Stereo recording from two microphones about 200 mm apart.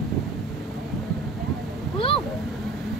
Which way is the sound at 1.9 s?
25° left (ahead or behind).